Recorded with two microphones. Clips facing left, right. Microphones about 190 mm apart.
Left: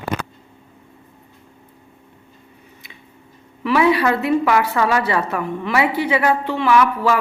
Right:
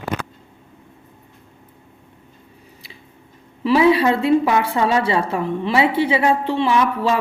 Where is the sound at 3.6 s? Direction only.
25° right (ahead or behind).